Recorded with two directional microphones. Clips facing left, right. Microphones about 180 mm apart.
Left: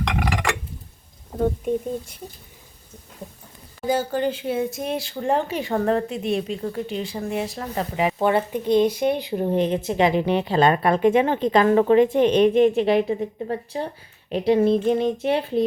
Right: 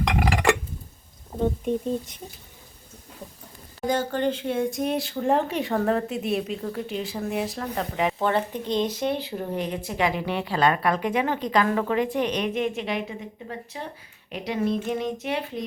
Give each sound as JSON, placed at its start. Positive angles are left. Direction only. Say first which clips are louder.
{"t": 3.8, "sound": "speech", "louder": "left 2 dB", "side_deg": 10}